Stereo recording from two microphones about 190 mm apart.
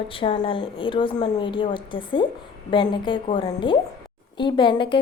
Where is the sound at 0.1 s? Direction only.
25° left (ahead or behind).